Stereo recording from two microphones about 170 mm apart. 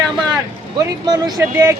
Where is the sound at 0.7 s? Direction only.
25° right (ahead or behind).